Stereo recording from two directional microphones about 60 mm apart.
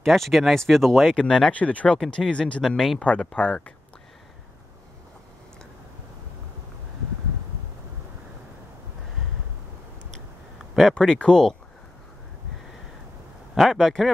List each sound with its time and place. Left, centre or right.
0.0 s speech: centre
1.5 s speech: left
2.6 s speech: centre
3.0 s speech: left
10.6 s a sound: centre
11.0 s speech: centre
13.6 s speech: centre